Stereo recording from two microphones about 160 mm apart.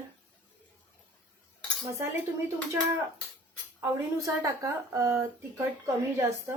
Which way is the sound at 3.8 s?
20° right (ahead or behind).